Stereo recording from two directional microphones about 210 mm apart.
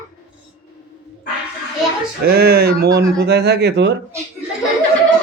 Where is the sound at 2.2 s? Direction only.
45° right (ahead or behind).